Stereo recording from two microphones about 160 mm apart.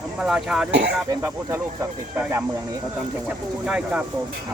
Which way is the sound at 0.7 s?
90° right.